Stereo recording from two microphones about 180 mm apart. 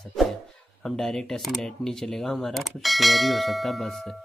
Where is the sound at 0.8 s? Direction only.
5° left (ahead or behind).